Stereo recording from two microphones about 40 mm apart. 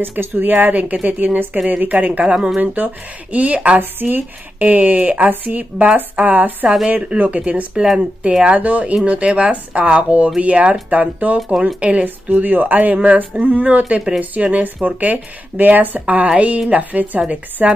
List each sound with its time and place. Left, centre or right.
0.0 s speech: right
2.3 s speech: right
2.6 s speech: right
11.3 s speech: centre
11.6 s speech: right
12.3 s speech: right